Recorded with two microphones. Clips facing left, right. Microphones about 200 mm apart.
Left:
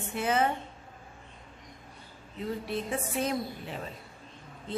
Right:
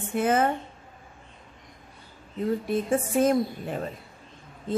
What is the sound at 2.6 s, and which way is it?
A woman's voice, 50° right (ahead or behind).